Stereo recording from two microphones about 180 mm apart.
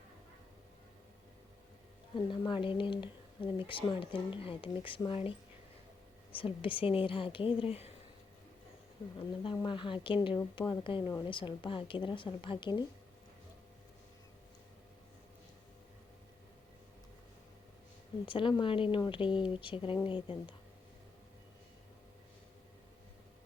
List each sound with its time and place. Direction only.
2.3 s speech: 25° left (ahead or behind)
6.3 s speech: 30° left (ahead or behind)
9.1 s speech: 30° left (ahead or behind)
18.3 s speech: 30° left (ahead or behind)